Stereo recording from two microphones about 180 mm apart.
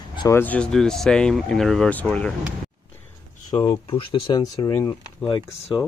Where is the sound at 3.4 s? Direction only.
20° left (ahead or behind).